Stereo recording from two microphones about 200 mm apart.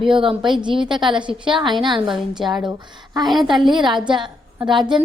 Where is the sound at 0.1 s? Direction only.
25° right (ahead or behind).